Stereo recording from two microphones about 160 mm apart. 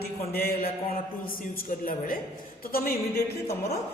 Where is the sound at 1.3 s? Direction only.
65° left (ahead or behind).